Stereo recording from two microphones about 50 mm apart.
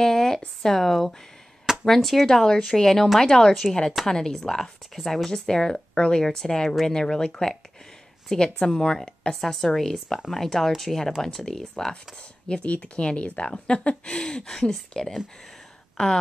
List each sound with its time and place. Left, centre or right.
0.0 s a sound: centre
0.6 s speech: centre
8.5 s speech: centre